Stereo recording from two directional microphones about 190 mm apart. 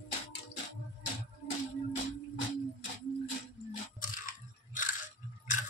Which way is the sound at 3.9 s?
45° left (ahead or behind).